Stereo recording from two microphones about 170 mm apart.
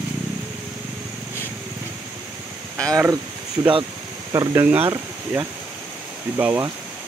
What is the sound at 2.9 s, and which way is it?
Speech, 15° right (ahead or behind).